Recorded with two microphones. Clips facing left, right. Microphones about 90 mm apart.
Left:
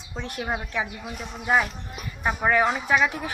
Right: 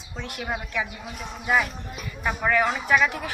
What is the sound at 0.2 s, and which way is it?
Speech, 30° left (ahead or behind).